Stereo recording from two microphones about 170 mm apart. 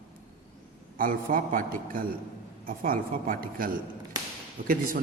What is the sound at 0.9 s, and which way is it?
A man's voice, 55° right (ahead or behind).